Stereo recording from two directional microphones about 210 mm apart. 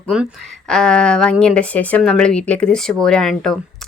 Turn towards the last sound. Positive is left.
turn(degrees=5)  # may be behind; listen again after turning